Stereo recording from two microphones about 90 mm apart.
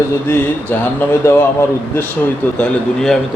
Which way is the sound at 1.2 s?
30° left (ahead or behind).